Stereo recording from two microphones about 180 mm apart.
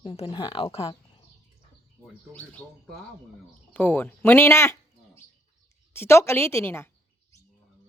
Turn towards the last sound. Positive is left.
turn(degrees=15)  # may be behind; listen again after turning